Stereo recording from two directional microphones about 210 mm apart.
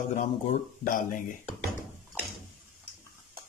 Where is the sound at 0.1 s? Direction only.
40° left (ahead or behind).